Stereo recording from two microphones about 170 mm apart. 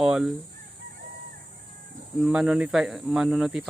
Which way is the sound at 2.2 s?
5° right (ahead or behind).